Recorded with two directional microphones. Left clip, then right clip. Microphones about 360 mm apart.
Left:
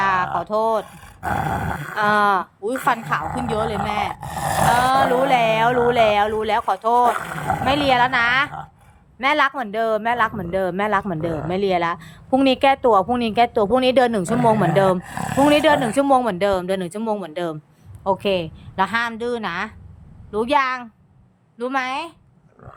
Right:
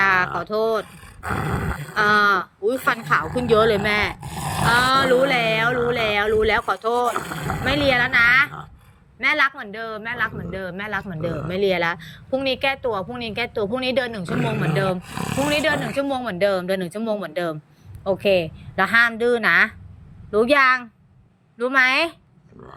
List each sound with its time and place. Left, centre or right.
0.0 s speech: centre